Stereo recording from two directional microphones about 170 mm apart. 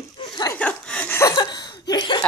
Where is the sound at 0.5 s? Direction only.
10° left (ahead or behind).